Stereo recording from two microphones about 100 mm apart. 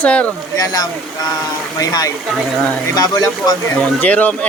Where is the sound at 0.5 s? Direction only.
40° left (ahead or behind).